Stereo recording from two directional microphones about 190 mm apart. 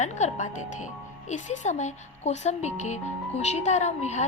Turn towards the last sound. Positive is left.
turn(degrees=35)  # may be behind; listen again after turning